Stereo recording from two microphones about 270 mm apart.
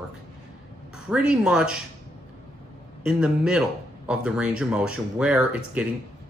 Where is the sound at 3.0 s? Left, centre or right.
Centre.